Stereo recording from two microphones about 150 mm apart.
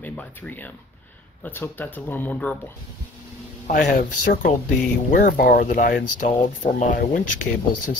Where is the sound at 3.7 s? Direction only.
60° left (ahead or behind).